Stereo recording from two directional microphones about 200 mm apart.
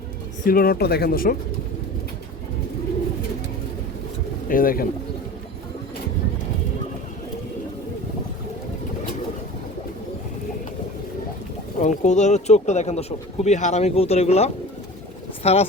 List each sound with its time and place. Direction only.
0.4 s speech: 45° left (ahead or behind)
4.4 s speech: 45° left (ahead or behind)
11.8 s speech: 35° left (ahead or behind)